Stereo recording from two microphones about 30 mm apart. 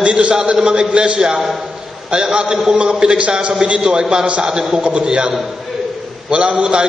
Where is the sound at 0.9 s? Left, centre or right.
Right.